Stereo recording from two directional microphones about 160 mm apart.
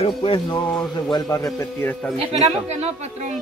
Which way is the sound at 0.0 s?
35° left (ahead or behind).